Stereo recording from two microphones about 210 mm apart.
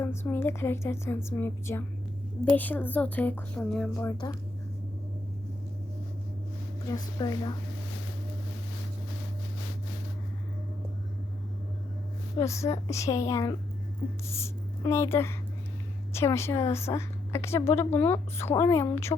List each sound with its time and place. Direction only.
0.0 s a woman's voice: 10° left (ahead or behind)
4.0 s a woman's voice: 15° left (ahead or behind)
6.9 s a woman's voice: 20° left (ahead or behind)
12.4 s a woman's voice: 15° left (ahead or behind)